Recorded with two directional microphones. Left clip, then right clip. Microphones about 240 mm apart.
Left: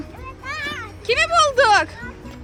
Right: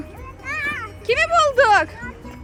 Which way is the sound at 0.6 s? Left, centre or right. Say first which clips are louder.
Right 4 dB; left.